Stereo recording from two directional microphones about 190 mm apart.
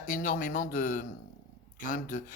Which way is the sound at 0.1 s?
45° left (ahead or behind).